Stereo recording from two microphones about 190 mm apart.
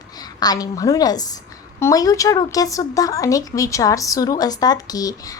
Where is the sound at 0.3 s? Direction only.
20° left (ahead or behind).